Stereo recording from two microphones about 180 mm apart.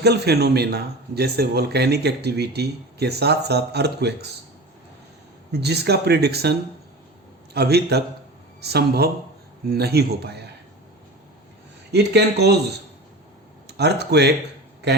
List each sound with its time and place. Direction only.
0.0 s a man's voice: 65° right (ahead or behind)
5.5 s a man's voice: 65° right (ahead or behind)
11.9 s speech: 65° right (ahead or behind)
13.7 s speech: 65° right (ahead or behind)